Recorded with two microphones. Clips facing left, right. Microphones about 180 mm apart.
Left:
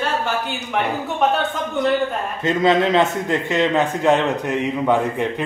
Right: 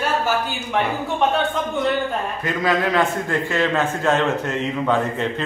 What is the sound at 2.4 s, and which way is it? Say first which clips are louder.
A man's voice: left 5 dB; 25° left (ahead or behind).